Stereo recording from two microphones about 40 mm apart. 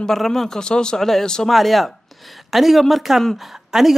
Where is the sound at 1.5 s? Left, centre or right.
Centre.